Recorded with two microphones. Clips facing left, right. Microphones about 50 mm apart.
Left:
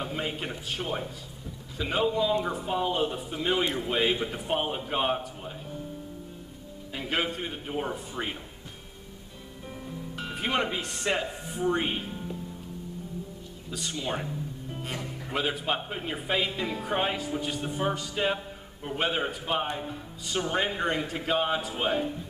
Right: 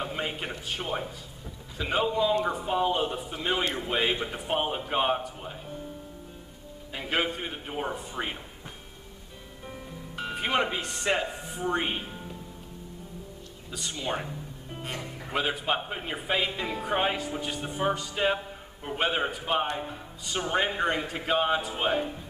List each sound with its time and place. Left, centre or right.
0.0 s a man's voice: centre
7.0 s speech: centre
9.8 s speech: centre
13.7 s speech: centre